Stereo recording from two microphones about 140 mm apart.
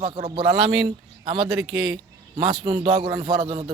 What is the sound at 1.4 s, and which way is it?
Speech, centre (ahead or behind).